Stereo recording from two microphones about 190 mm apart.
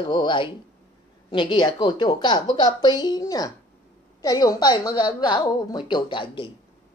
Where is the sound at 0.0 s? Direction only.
25° left (ahead or behind).